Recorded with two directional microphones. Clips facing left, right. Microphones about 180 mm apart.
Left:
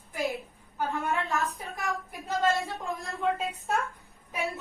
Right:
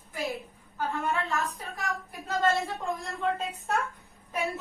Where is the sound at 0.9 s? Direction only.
15° left (ahead or behind).